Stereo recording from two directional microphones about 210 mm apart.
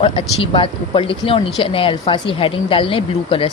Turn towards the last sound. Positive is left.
turn(degrees=25)  # may be behind; listen again after turning